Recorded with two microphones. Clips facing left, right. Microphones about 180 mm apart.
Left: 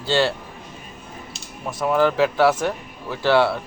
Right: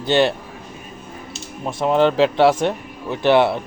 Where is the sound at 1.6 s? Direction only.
25° right (ahead or behind).